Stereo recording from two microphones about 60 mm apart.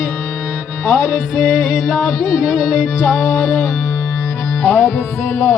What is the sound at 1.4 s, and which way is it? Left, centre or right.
Music, centre.